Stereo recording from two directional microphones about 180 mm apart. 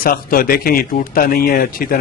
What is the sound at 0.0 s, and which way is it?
A man's voice, 55° left (ahead or behind).